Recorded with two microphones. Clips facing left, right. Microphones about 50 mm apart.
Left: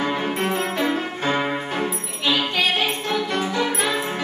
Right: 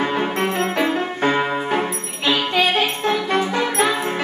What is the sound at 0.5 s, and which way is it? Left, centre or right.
Music, right.